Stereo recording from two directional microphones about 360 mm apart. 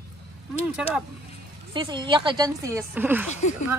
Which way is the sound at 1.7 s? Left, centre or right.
Centre.